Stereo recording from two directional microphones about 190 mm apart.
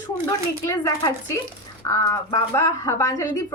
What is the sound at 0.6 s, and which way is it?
A woman's voice, 15° left (ahead or behind).